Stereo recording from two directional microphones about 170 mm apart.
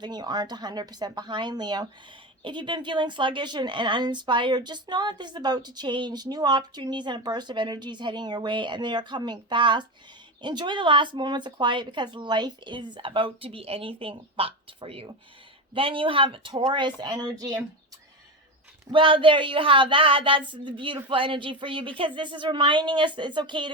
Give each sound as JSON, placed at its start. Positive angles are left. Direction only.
{"t": 0.0, "sound": "a woman's voice", "side_deg": -25}
{"t": 18.9, "sound": "a woman's voice", "side_deg": -30}